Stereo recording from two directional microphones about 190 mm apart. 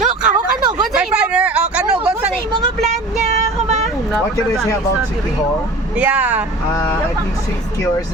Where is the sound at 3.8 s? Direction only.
Centre (ahead or behind).